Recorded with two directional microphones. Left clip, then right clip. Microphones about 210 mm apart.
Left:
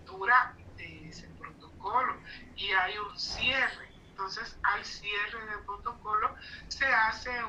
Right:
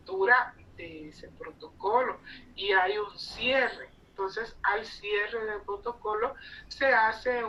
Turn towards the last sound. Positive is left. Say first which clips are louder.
# right 3 dB
turn(degrees=-35)  # may be behind; listen again after turning